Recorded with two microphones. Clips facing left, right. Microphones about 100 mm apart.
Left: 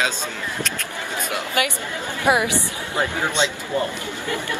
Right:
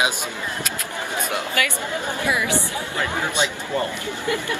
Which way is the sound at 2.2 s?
25° left (ahead or behind).